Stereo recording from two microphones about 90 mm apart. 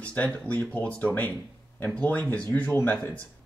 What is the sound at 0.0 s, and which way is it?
Speech, 15° left (ahead or behind).